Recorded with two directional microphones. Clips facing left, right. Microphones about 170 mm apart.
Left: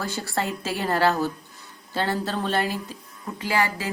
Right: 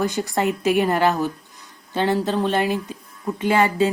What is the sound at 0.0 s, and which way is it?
A woman's voice, 15° right (ahead or behind).